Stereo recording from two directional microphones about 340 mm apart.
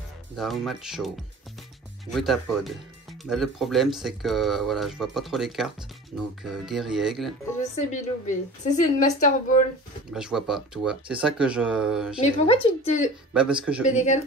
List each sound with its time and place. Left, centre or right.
0.4 s speech: centre
7.9 s a woman's voice: left
10.1 s speech: centre
12.4 s speech: centre
13.3 s speech: centre
13.8 s a woman's voice: left